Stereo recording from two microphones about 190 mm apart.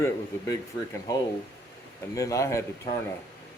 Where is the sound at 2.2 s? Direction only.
15° left (ahead or behind).